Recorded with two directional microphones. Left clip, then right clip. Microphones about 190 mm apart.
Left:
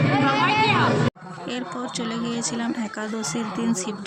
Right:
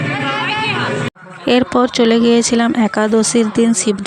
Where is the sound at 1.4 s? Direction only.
45° right (ahead or behind).